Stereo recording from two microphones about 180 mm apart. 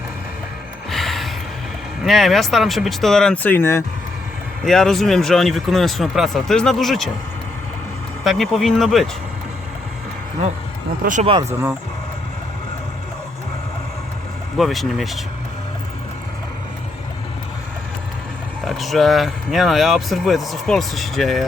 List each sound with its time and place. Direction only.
0.9 s gasp: centre (ahead or behind)
2.0 s speech: centre (ahead or behind)
4.6 s speech: centre (ahead or behind)
8.2 s speech: centre (ahead or behind)
11.0 s speech: 45° right (ahead or behind)
11.3 s speech: 30° right (ahead or behind)
14.6 s speech: centre (ahead or behind)
18.6 s speech: centre (ahead or behind)